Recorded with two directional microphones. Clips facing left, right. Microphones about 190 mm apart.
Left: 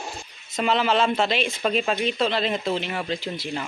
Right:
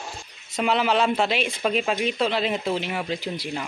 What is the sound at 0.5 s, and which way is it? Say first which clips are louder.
Speech: even; 10° right (ahead or behind).